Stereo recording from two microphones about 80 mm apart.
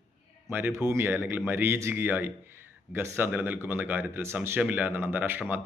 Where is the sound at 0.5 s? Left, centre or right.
Right.